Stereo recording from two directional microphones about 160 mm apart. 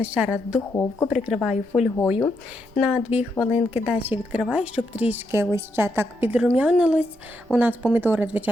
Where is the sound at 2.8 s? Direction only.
5° right (ahead or behind).